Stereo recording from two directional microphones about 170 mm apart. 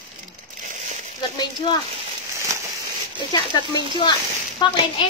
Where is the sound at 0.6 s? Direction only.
45° right (ahead or behind).